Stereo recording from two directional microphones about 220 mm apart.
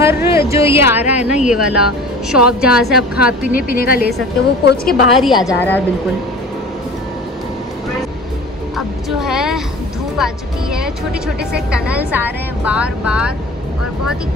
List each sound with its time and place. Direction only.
0.0 s a woman's voice: 10° right (ahead or behind)
3.5 s a woman's voice: 45° left (ahead or behind)
4.8 s a woman's voice: centre (ahead or behind)
8.7 s a woman's voice: centre (ahead or behind)
10.1 s music: centre (ahead or behind)
11.7 s a woman's voice: 5° right (ahead or behind)